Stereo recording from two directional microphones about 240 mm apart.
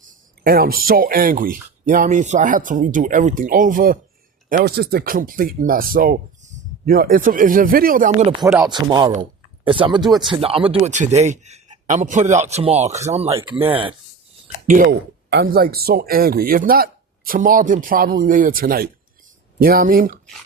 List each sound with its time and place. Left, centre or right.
0.4 s speech: right
8.3 s a sound: centre
8.7 s a man's voice: centre
10.0 s speech: centre
10.3 s a man's voice: right
13.3 s a sound: centre
13.6 s a man's voice: right
14.7 s speech: right